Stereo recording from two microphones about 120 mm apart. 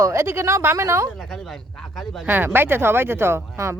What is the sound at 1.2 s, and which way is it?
Speech, centre (ahead or behind).